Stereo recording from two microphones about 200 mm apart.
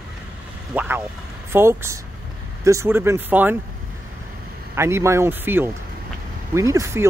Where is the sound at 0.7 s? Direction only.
10° right (ahead or behind).